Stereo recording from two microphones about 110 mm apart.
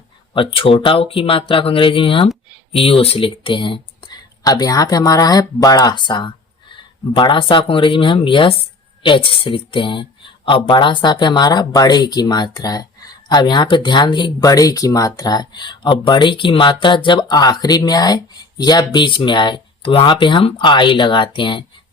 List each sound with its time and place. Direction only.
0.3 s speech: 55° left (ahead or behind)